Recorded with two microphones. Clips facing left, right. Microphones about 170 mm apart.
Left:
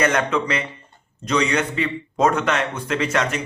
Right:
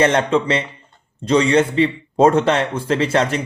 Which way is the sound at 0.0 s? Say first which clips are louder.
Right 4 dB; 30° right (ahead or behind).